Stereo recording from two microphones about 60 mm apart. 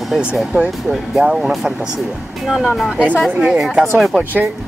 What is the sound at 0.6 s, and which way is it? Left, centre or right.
Speech, centre.